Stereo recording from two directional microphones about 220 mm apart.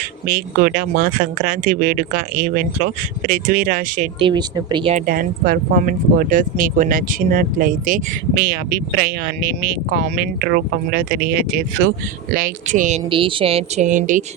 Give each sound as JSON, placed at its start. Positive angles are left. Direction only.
{"t": 0.3, "sound": "speech", "side_deg": -40}
{"t": 4.2, "sound": "a woman's voice", "side_deg": -20}
{"t": 5.0, "sound": "speech", "side_deg": -40}
{"t": 13.1, "sound": "a woman's voice", "side_deg": -25}